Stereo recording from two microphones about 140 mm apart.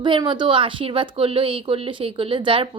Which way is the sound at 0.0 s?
35° right (ahead or behind).